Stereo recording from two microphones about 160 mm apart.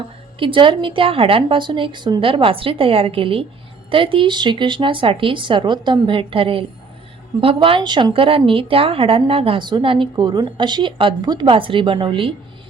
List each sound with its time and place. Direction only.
0.3 s a woman's voice: 30° right (ahead or behind)